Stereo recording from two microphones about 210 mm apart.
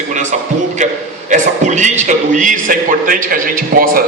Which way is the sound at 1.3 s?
35° right (ahead or behind).